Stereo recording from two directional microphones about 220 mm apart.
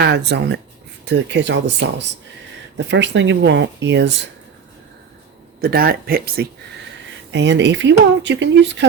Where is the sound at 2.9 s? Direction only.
55° right (ahead or behind).